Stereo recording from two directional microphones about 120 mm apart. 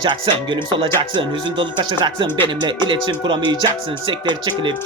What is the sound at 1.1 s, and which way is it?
Speech, 40° right (ahead or behind).